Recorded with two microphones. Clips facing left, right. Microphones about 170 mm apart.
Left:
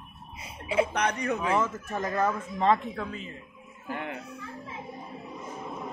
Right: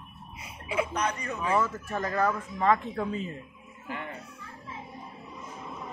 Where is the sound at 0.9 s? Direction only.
75° left (ahead or behind).